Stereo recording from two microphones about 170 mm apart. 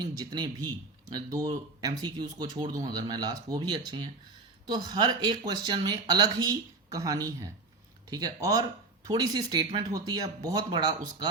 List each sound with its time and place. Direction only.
0.0 s speech: 25° right (ahead or behind)